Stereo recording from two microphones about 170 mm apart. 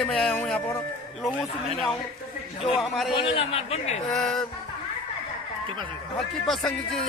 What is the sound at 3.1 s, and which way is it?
Speech, 35° left (ahead or behind).